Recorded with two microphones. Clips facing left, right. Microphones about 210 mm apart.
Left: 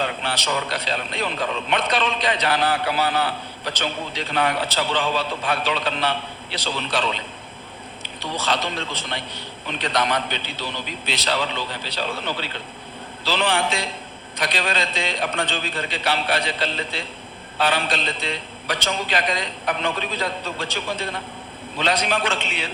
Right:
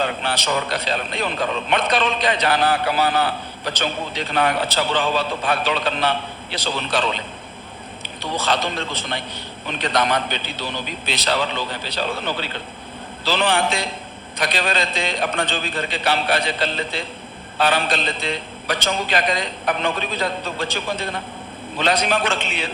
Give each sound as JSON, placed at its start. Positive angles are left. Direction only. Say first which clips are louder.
{"t": 0.0, "sound": "a man's voice", "louder": "right 3 dB", "side_deg": -45}
{"t": 21.8, "sound": "a man's voice", "louder": "right 2 dB", "side_deg": -50}